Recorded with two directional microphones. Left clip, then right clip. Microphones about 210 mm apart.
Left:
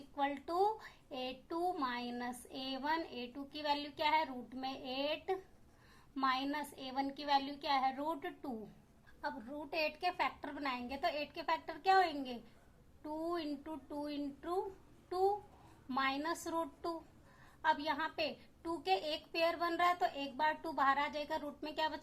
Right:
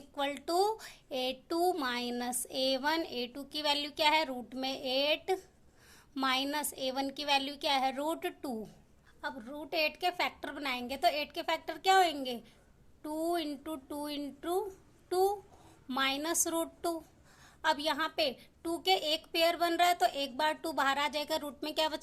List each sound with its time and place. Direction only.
0.2 s a woman's voice: 45° right (ahead or behind)
15.9 s a woman's voice: 45° right (ahead or behind)